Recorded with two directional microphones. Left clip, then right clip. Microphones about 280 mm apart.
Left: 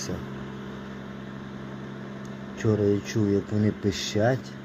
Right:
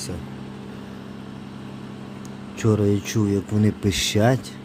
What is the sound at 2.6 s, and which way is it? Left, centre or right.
Speech, right.